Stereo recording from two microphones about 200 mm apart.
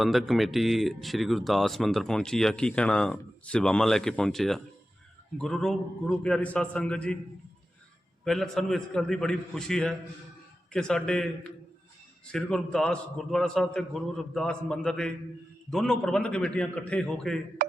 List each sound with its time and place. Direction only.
0.0 s speech: centre (ahead or behind)
8.2 s speech: centre (ahead or behind)